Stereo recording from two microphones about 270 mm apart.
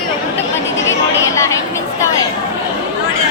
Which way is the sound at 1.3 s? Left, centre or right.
Centre.